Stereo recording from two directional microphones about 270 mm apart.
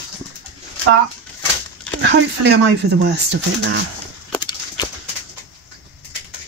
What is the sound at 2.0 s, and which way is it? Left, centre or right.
Speech, right.